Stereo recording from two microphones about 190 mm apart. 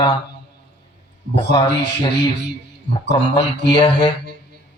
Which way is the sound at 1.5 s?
25° left (ahead or behind).